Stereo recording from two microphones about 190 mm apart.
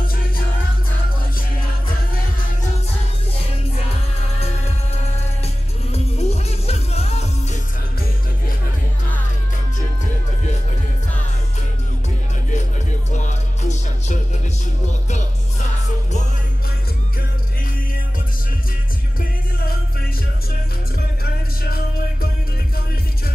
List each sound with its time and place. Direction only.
5.9 s music: 35° left (ahead or behind)
13.1 s music: 40° left (ahead or behind)
21.2 s music: 50° left (ahead or behind)